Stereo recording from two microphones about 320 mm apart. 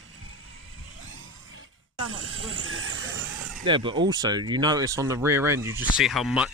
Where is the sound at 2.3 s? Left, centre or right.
Right.